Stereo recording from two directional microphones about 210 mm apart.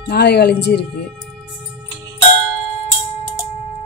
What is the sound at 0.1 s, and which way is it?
Speech, 50° left (ahead or behind).